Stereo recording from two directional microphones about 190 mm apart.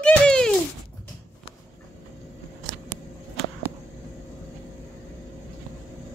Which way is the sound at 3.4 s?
55° right (ahead or behind).